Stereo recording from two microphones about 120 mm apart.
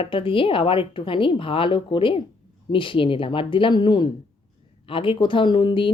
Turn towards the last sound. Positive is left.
turn(degrees=45)  # may be behind; listen again after turning